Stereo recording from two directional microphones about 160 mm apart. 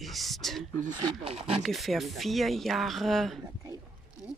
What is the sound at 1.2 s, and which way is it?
Speech, 40° right (ahead or behind).